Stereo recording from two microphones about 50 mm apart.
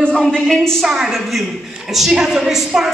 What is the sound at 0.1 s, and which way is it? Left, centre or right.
Speech, centre.